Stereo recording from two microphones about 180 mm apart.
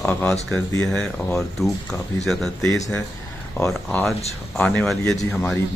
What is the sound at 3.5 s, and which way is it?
Speech, 5° left (ahead or behind).